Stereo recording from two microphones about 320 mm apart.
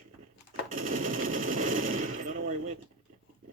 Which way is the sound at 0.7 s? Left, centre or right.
Right.